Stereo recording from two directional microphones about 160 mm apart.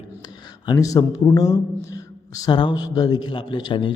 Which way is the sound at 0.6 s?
25° left (ahead or behind).